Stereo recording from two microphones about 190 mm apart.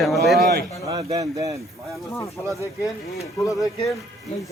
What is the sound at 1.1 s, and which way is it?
Speech, 20° right (ahead or behind).